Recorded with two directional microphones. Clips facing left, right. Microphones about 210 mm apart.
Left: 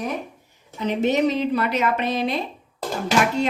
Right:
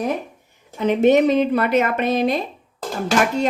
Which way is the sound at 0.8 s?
55° right (ahead or behind).